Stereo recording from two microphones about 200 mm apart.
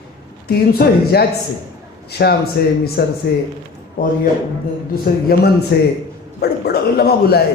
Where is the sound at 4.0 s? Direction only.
45° left (ahead or behind).